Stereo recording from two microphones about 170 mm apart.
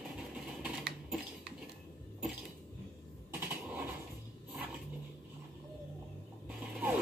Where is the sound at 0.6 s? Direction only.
5° right (ahead or behind).